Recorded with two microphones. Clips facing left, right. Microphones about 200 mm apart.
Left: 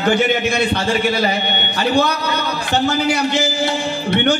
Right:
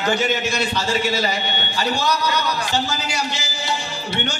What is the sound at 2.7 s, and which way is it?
Music, 60° left (ahead or behind).